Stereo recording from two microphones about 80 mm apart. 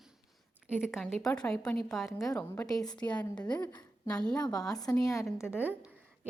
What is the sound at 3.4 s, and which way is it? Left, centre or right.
Speech, left.